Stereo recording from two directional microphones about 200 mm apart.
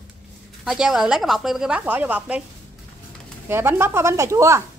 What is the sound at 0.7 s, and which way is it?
Speech, centre (ahead or behind).